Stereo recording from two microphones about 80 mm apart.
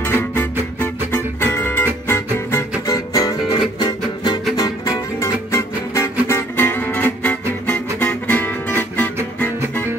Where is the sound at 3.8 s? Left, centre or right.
Left.